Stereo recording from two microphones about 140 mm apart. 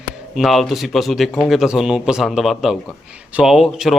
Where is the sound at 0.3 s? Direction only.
Centre (ahead or behind).